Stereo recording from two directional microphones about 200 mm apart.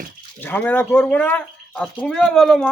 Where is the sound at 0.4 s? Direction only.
10° left (ahead or behind).